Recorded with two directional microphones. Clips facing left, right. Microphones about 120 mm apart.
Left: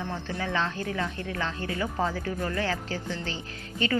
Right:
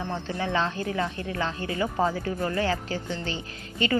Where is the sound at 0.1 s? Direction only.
20° right (ahead or behind).